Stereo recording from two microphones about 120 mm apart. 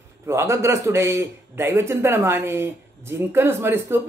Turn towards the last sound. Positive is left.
turn(degrees=-20)  # may be behind; listen again after turning